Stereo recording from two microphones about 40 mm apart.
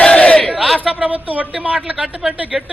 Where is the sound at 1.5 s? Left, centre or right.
Right.